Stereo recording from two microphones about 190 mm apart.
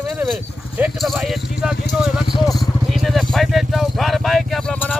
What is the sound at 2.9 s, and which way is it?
Speech, centre (ahead or behind).